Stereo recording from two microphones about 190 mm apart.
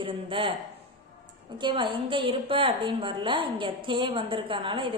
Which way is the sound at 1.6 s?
25° right (ahead or behind).